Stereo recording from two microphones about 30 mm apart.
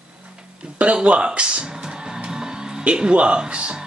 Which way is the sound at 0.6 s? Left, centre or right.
Right.